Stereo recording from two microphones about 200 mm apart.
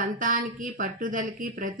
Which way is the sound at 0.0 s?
40° right (ahead or behind).